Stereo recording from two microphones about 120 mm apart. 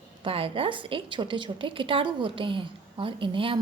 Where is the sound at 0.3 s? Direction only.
50° right (ahead or behind).